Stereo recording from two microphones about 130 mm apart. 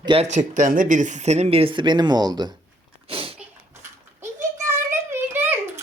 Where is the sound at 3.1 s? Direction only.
45° right (ahead or behind).